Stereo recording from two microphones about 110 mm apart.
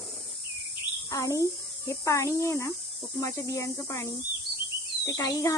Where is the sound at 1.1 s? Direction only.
30° left (ahead or behind).